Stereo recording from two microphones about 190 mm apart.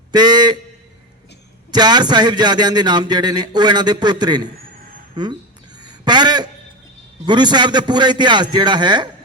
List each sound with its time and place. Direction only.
0.1 s a man's voice: 20° right (ahead or behind)
1.7 s a man's voice: 20° right (ahead or behind)
5.8 s a sound: 20° right (ahead or behind)
7.3 s a man's voice: 20° right (ahead or behind)